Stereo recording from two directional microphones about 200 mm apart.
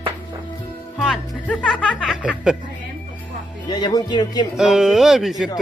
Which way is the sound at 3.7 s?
20° left (ahead or behind).